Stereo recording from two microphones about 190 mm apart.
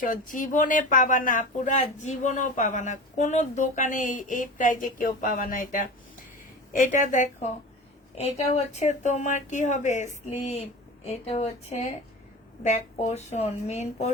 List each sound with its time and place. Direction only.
0.0 s speech: 45° left (ahead or behind)